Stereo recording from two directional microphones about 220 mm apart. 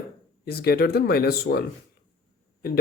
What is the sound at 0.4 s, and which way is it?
Speech, 45° left (ahead or behind).